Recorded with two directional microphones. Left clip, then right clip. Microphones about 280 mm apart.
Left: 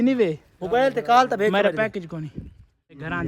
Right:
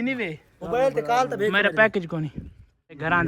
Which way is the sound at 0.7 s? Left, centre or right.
Left.